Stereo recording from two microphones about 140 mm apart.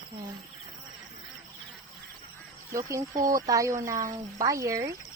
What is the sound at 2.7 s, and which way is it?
Speech, 20° right (ahead or behind).